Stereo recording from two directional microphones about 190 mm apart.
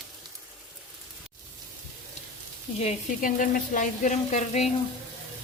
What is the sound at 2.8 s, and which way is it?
Speech, 45° left (ahead or behind).